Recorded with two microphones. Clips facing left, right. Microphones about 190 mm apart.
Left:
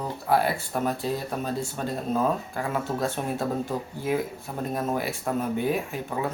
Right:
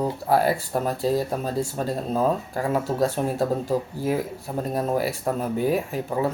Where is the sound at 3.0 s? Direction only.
40° right (ahead or behind).